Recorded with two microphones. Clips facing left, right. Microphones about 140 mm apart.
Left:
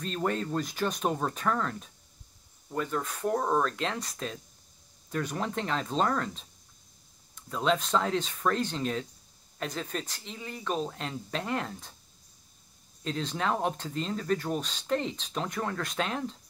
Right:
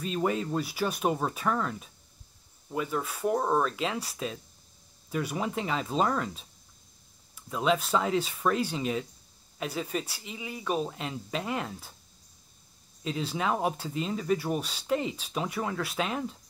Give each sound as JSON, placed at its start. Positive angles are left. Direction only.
{"t": 0.0, "sound": "speech", "side_deg": -5}
{"t": 13.0, "sound": "speech", "side_deg": -5}